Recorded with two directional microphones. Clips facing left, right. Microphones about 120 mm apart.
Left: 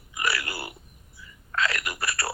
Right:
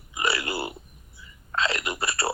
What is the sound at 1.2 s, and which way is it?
Whispering, 25° right (ahead or behind).